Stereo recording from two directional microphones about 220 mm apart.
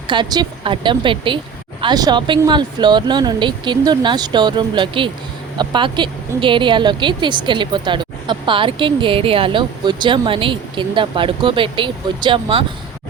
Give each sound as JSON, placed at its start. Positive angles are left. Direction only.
{"t": 0.1, "sound": "speech", "side_deg": -20}